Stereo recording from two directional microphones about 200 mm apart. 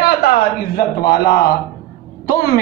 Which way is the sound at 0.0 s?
50° left (ahead or behind).